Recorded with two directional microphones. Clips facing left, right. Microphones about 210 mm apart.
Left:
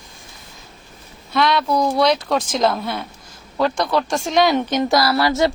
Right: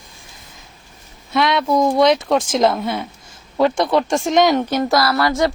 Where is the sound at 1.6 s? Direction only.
20° right (ahead or behind).